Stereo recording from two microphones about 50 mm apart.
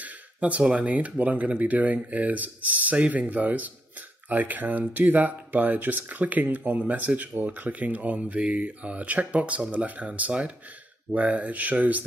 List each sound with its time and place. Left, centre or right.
0.0 s speech: right